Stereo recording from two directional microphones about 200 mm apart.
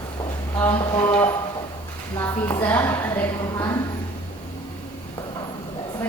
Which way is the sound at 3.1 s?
10° left (ahead or behind).